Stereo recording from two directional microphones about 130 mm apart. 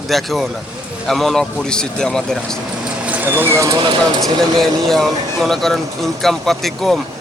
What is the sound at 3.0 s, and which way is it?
Speech, 15° right (ahead or behind).